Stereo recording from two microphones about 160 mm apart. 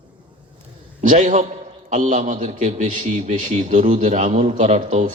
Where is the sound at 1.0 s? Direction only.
50° right (ahead or behind).